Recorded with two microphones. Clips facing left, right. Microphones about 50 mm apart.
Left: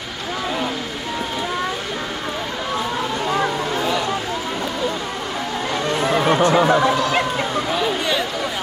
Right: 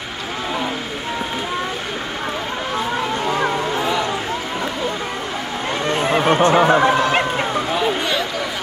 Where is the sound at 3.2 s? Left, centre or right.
Right.